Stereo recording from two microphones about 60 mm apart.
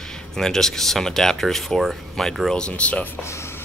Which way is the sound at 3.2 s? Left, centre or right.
Left.